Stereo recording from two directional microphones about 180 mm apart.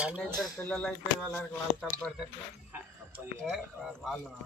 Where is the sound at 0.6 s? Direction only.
5° left (ahead or behind).